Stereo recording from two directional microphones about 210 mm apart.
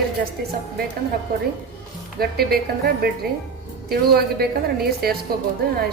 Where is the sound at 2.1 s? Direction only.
50° right (ahead or behind).